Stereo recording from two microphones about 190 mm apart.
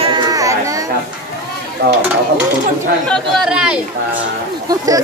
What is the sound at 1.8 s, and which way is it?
Stir, 60° right (ahead or behind).